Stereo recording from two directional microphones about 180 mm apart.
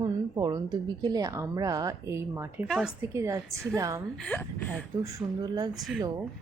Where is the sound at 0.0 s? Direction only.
20° right (ahead or behind).